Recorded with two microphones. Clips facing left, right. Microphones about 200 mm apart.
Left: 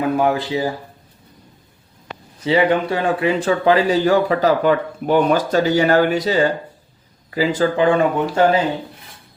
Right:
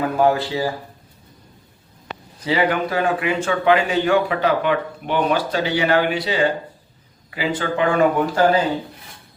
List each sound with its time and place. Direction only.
0.2 s speech: 15° left (ahead or behind)
2.4 s speech: 25° left (ahead or behind)